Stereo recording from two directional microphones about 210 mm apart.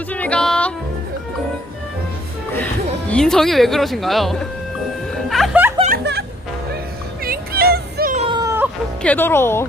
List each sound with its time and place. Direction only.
0.1 s music: 5° left (ahead or behind)
3.1 s speech: 5° left (ahead or behind)
5.3 s music: 5° right (ahead or behind)
5.9 s music: 50° right (ahead or behind)
7.3 s music: 45° right (ahead or behind)
8.3 s a sound: 15° right (ahead or behind)
9.0 s speech: 10° left (ahead or behind)